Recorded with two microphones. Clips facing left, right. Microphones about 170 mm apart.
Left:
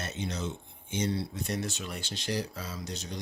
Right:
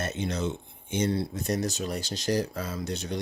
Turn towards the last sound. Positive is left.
turn(degrees=-60)  # may be behind; listen again after turning